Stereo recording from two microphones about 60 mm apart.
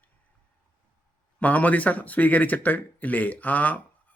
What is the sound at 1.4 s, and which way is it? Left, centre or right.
Speech, left.